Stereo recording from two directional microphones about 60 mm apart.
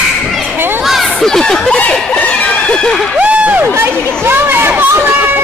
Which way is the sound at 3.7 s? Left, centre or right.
Right.